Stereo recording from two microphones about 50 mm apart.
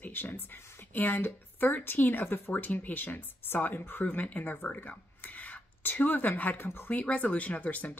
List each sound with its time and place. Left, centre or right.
0.0 s speech: left
6.6 s speech: left
6.9 s speech: left